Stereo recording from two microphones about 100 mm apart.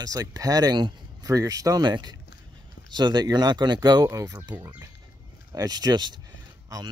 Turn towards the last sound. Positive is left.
turn(degrees=-40)  # may be behind; listen again after turning